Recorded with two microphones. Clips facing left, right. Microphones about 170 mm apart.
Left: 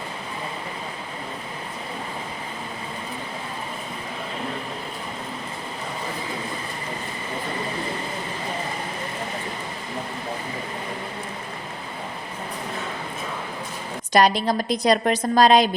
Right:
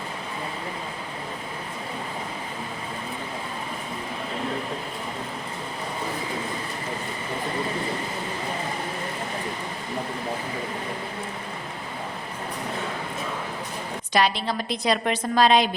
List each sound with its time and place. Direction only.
14.1 s a woman's voice: 45° left (ahead or behind)